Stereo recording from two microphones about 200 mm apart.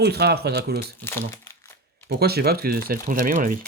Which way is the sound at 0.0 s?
55° right (ahead or behind).